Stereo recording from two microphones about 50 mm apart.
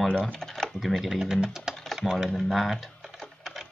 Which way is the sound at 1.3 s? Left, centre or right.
Centre.